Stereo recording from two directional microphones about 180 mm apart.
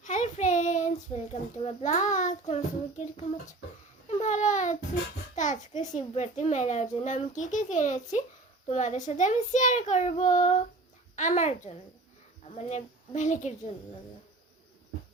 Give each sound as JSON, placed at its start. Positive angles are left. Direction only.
{"t": 0.0, "sound": "a child's voice", "side_deg": 45}
{"t": 4.2, "sound": "a child's voice", "side_deg": 40}